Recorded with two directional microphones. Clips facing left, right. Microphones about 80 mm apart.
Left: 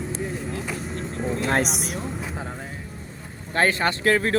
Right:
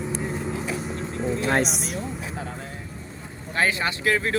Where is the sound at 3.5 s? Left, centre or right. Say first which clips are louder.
Left 3 dB; left.